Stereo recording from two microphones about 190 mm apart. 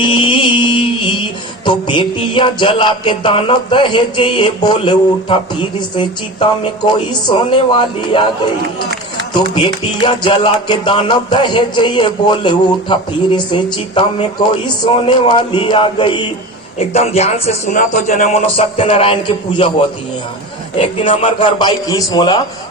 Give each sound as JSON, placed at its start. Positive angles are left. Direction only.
{"t": 0.0, "sound": "music", "side_deg": 25}
{"t": 9.6, "sound": "music", "side_deg": 25}
{"t": 15.5, "sound": "music", "side_deg": 25}
{"t": 16.7, "sound": "a man's voice", "side_deg": 30}
{"t": 18.4, "sound": "music", "side_deg": 30}
{"t": 20.7, "sound": "music", "side_deg": 30}